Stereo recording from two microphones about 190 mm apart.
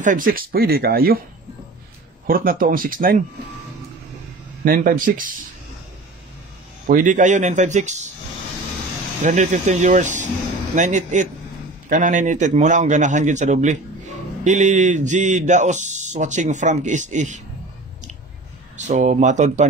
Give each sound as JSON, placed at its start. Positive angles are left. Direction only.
{"t": 0.0, "sound": "speech", "side_deg": -45}
{"t": 2.2, "sound": "speech", "side_deg": -50}
{"t": 4.6, "sound": "speech", "side_deg": -45}
{"t": 6.9, "sound": "speech", "side_deg": -45}
{"t": 9.2, "sound": "speech", "side_deg": -40}
{"t": 18.8, "sound": "speech", "side_deg": -40}